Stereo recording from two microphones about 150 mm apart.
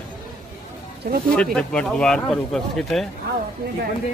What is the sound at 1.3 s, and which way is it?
Speech, 5° left (ahead or behind).